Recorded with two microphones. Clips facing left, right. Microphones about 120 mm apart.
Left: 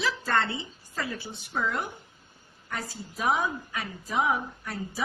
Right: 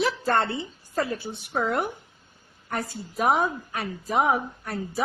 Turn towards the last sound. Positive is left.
turn(degrees=-55)  # may be behind; listen again after turning